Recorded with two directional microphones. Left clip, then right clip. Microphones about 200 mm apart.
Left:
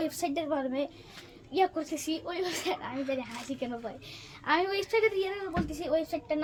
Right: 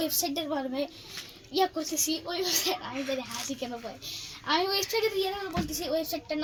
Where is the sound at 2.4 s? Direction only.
25° left (ahead or behind).